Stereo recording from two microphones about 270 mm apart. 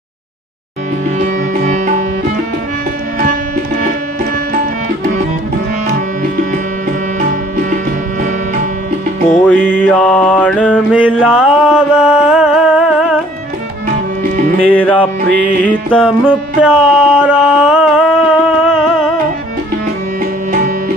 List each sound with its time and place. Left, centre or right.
1.2 s music: right
3.2 s music: right
9.3 s music: centre
14.7 s music: centre
20.5 s music: right